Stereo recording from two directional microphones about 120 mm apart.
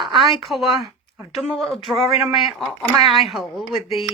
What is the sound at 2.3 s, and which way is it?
Speech, 50° left (ahead or behind).